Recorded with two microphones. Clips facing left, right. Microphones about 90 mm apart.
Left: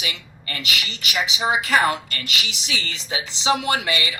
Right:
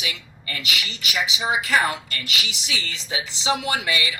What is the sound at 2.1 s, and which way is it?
A woman's voice, 65° left (ahead or behind).